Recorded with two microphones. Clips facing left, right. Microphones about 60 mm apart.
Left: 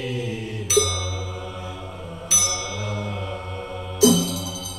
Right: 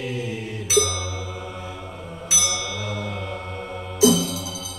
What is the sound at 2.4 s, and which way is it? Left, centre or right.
Music, left.